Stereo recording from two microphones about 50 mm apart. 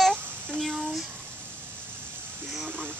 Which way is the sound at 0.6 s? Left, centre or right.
Centre.